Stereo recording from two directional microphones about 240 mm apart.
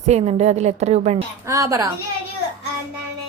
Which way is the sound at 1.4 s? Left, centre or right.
Centre.